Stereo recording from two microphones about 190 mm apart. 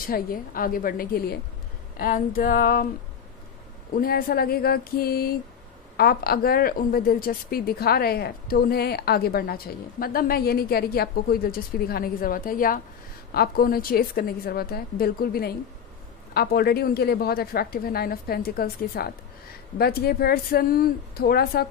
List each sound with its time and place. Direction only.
0.0 s a woman's voice: 50° left (ahead or behind)
4.0 s a woman's voice: 50° left (ahead or behind)